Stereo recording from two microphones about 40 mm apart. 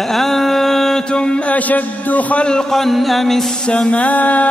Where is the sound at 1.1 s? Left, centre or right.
Left.